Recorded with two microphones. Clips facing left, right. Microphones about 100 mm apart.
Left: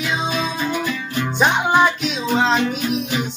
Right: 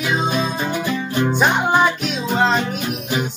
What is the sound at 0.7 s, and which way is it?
Music, 30° right (ahead or behind).